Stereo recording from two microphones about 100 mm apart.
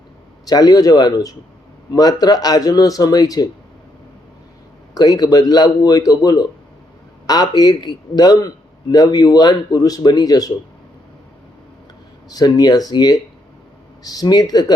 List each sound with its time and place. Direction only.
0.4 s a man's voice: 40° left (ahead or behind)
4.9 s a man's voice: 40° left (ahead or behind)
12.3 s a man's voice: 40° left (ahead or behind)